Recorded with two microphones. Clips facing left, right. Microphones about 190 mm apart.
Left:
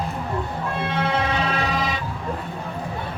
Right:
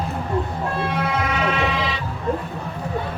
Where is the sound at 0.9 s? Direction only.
30° left (ahead or behind); by 2.0 s 45° left (ahead or behind).